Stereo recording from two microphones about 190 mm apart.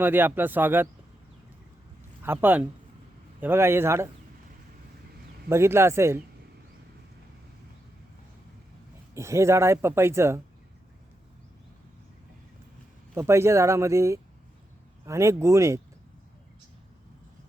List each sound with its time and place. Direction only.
0.0 s speech: 10° right (ahead or behind)
2.2 s speech: 10° right (ahead or behind)
5.5 s speech: 15° right (ahead or behind)
9.1 s speech: 15° right (ahead or behind)
13.1 s speech: 15° right (ahead or behind)